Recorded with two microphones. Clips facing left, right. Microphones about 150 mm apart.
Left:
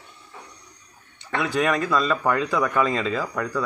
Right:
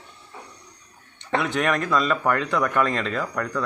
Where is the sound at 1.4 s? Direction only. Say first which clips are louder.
Left 3 dB; centre (ahead or behind).